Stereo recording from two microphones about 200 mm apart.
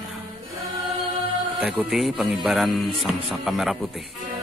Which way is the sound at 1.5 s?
Centre (ahead or behind).